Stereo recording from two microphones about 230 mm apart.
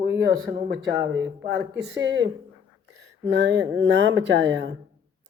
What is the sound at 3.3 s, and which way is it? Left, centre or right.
Speech, right.